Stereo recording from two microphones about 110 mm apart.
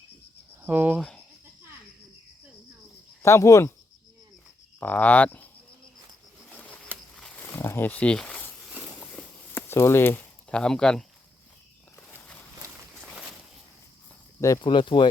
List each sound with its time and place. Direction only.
0.6 s cricket: 15° right (ahead or behind)
3.2 s speech: 25° left (ahead or behind)
4.8 s speech: 15° left (ahead or behind)
6.9 s a sound: 5° left (ahead or behind)
7.4 s a sound: 20° left (ahead or behind)
10.5 s speech: 5° left (ahead or behind)
12.1 s walk: 15° left (ahead or behind)
14.6 s speech: 45° left (ahead or behind)